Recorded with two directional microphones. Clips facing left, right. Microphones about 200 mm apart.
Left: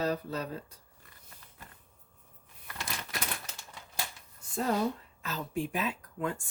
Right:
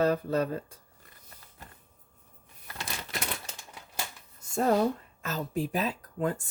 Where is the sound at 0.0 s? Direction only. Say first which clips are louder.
Right 6 dB; 55° right (ahead or behind).